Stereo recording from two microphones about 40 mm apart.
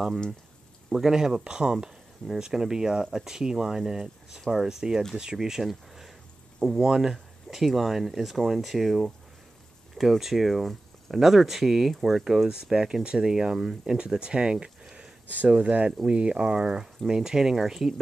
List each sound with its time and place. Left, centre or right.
0.8 s speech: centre
4.4 s speech: centre
4.6 s speech: centre
12.4 s speech: centre
15.4 s speech: right; by 17.9 s centre